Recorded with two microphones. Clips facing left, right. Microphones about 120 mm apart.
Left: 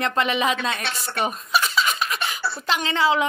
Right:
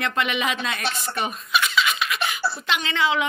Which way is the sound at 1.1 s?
35° left (ahead or behind).